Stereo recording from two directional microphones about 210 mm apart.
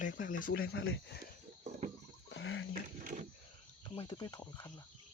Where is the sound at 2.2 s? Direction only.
65° left (ahead or behind).